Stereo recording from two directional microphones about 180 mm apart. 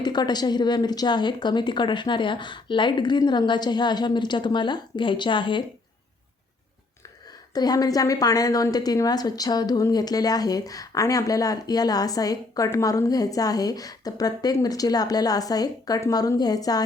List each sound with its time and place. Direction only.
0.0 s a woman's voice: 25° left (ahead or behind)
7.5 s a woman's voice: 20° left (ahead or behind)